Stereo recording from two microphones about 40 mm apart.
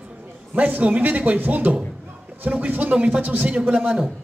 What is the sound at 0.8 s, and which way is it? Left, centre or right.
Music, right.